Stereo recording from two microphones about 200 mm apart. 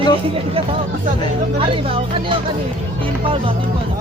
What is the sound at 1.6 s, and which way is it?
Speech, 25° right (ahead or behind).